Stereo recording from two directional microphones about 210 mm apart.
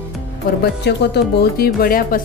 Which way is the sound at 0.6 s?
50° left (ahead or behind).